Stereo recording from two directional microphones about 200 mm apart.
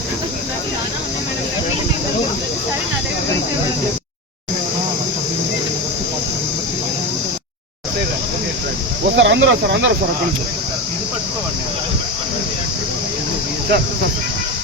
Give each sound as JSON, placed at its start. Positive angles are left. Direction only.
{"t": 9.1, "sound": "speech", "side_deg": -65}